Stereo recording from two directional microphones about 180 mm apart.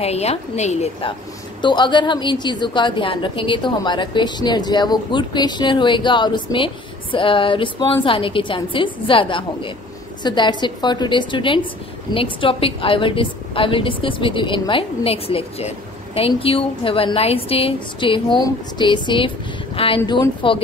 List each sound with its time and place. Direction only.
0.0 s a woman's voice: 35° left (ahead or behind)
1.6 s a woman's voice: 25° left (ahead or behind)